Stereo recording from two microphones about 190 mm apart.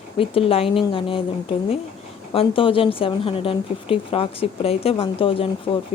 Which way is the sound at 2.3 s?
30° left (ahead or behind).